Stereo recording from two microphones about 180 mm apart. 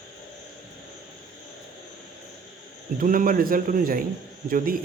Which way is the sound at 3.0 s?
50° right (ahead or behind).